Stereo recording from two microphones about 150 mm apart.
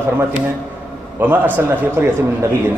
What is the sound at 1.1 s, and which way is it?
Speech, 15° right (ahead or behind).